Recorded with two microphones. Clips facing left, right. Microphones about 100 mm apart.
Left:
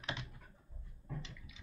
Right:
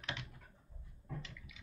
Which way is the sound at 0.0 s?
25° left (ahead or behind).